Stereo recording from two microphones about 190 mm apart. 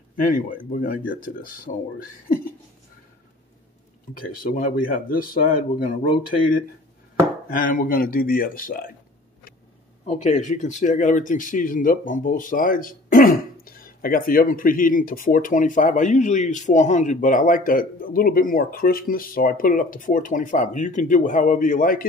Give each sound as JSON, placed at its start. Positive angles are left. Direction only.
{"t": 0.2, "sound": "speech", "side_deg": 45}
{"t": 4.2, "sound": "speech", "side_deg": 50}
{"t": 7.4, "sound": "speech", "side_deg": 45}
{"t": 10.0, "sound": "speech", "side_deg": 35}